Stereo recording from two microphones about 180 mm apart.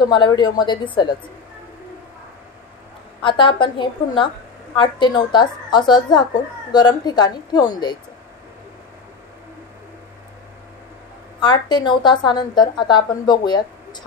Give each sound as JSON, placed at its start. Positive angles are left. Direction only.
{"t": 0.1, "sound": "a woman's voice", "side_deg": 25}
{"t": 3.2, "sound": "a woman's voice", "side_deg": 25}
{"t": 11.4, "sound": "a woman's voice", "side_deg": 25}